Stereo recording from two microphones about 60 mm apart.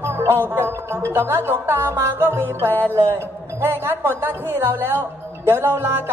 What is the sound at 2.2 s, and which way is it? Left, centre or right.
Speech, right.